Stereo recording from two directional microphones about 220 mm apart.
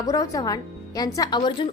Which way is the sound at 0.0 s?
15° left (ahead or behind).